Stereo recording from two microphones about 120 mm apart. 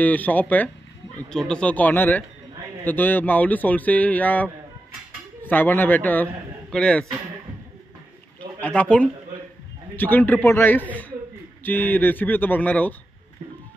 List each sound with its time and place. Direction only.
0.0 s speech: 15° left (ahead or behind)
8.5 s speech: 10° left (ahead or behind)